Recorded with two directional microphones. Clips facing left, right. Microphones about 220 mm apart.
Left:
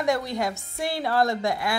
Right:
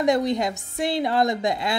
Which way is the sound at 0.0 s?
20° right (ahead or behind).